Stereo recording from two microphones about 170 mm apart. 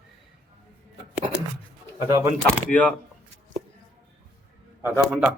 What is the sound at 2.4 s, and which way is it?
Speech, 10° left (ahead or behind).